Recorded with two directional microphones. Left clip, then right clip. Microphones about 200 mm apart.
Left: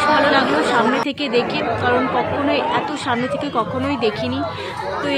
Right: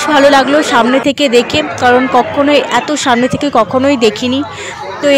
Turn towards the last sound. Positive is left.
turn(degrees=-45)  # may be behind; listen again after turning